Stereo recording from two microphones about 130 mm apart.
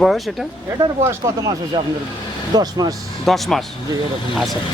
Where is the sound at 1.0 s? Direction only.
25° right (ahead or behind).